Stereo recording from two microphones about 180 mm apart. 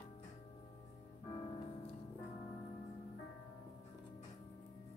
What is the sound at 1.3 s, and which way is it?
Music, 30° left (ahead or behind).